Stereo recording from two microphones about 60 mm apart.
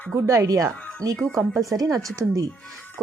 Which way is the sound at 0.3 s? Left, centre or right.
Right.